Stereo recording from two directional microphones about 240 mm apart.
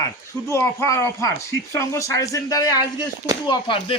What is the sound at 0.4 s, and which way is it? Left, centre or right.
Speech, centre.